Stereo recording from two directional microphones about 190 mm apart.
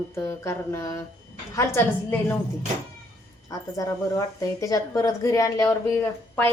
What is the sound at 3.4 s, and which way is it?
A woman's voice, 20° left (ahead or behind).